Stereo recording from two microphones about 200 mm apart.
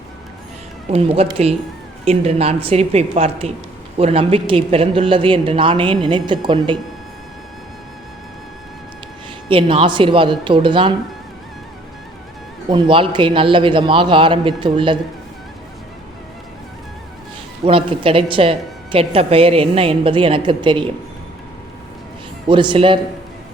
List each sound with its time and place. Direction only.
0.9 s a woman's voice: 30° right (ahead or behind)
9.5 s a woman's voice: 25° right (ahead or behind)
12.7 s a woman's voice: 25° right (ahead or behind)
17.7 s a woman's voice: 25° right (ahead or behind)
22.4 s a woman's voice: 25° right (ahead or behind)